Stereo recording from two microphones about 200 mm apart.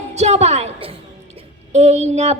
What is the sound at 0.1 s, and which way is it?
A woman's voice, 35° right (ahead or behind).